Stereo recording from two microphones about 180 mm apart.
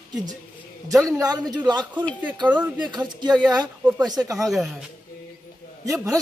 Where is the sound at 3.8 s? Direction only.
5° right (ahead or behind).